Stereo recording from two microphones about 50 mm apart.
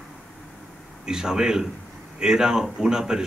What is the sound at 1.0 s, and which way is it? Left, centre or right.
Speech, centre.